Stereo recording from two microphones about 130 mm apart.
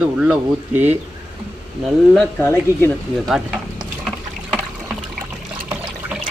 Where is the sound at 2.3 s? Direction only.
15° left (ahead or behind).